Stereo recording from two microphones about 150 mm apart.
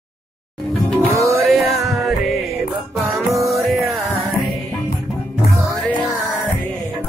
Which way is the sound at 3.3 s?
Centre (ahead or behind).